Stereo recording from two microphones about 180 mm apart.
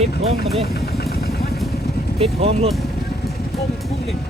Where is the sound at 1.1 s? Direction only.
60° left (ahead or behind).